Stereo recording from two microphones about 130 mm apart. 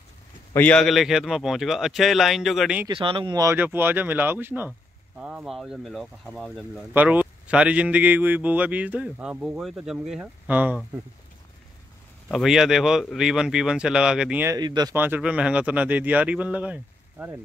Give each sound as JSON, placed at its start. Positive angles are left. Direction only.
{"t": 0.6, "sound": "speech", "side_deg": 10}
{"t": 2.9, "sound": "speech", "side_deg": -40}
{"t": 3.3, "sound": "a man's voice", "side_deg": -20}
{"t": 6.9, "sound": "a man's voice", "side_deg": -15}
{"t": 12.3, "sound": "speech", "side_deg": 0}
{"t": 14.6, "sound": "speech", "side_deg": -35}
{"t": 15.0, "sound": "a man's voice", "side_deg": -15}